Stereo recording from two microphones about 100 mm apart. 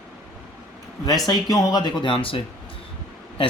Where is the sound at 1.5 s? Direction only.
40° left (ahead or behind).